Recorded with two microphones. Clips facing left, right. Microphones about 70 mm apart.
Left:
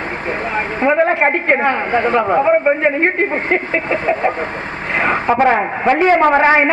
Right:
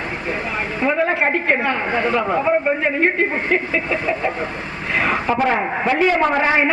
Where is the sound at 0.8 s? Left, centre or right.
Left.